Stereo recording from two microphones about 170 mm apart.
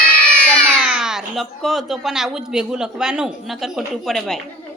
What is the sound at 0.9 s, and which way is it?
A woman's voice, 5° right (ahead or behind).